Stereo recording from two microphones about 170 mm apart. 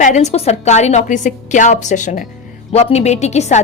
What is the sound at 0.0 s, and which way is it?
A woman's voice, 45° left (ahead or behind).